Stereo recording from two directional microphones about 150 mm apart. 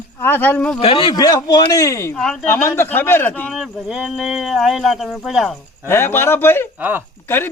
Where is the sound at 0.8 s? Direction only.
40° left (ahead or behind).